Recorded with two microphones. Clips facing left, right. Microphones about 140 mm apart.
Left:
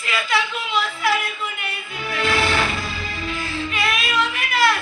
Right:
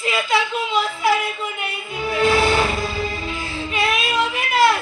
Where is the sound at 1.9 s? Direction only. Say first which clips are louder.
Right 5 dB; 25° right (ahead or behind).